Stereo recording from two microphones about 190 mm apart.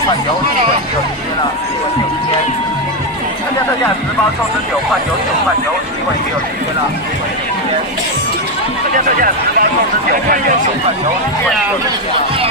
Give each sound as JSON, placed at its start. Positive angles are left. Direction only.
{"t": 9.0, "sound": "speech", "side_deg": -50}